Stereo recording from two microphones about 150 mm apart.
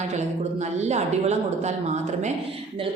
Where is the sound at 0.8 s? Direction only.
50° right (ahead or behind).